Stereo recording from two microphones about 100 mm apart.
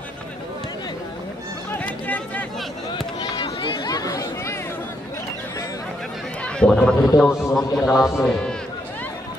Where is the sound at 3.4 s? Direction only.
60° left (ahead or behind); by 4.6 s 35° left (ahead or behind).